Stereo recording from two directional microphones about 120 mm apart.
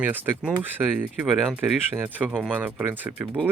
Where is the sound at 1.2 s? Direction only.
Centre (ahead or behind).